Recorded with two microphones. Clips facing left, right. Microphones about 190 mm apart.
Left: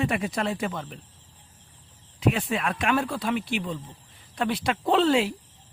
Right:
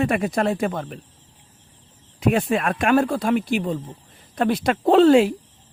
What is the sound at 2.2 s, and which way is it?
A man's voice, 50° right (ahead or behind).